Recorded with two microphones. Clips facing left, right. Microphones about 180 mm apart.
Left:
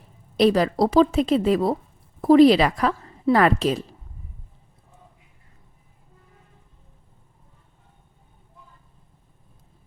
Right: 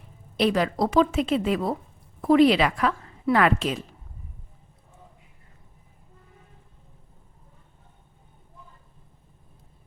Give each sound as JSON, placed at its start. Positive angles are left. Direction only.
{"t": 0.3, "sound": "a woman's voice", "side_deg": 35}